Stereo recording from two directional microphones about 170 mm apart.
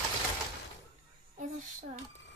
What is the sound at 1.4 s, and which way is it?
Speech, 50° right (ahead or behind).